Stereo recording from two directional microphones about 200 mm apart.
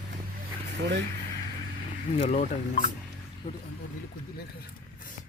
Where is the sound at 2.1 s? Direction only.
35° left (ahead or behind).